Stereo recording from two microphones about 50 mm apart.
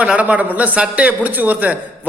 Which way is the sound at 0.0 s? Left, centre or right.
Right.